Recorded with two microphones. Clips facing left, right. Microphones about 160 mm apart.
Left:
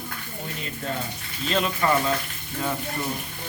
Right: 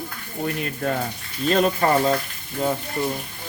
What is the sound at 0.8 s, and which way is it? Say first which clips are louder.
Speech: right 6 dB; 60° right (ahead or behind).